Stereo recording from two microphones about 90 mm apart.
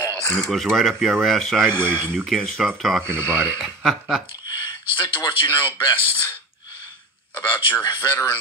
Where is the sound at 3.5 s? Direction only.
Centre (ahead or behind).